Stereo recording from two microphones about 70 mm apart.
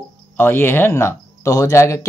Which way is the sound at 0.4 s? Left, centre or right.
Left.